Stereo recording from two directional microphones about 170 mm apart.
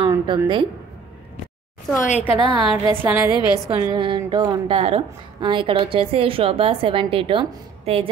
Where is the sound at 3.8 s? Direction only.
25° right (ahead or behind).